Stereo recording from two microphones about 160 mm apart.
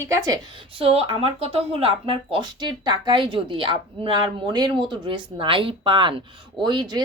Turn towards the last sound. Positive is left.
turn(degrees=-25)  # may be behind; listen again after turning